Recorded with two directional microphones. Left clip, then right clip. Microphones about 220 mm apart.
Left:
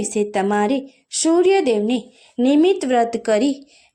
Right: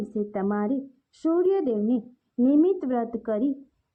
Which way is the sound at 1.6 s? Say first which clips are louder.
Left 7 dB; 10° left (ahead or behind).